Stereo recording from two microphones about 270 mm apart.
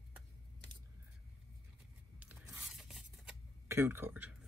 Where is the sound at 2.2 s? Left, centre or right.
Centre.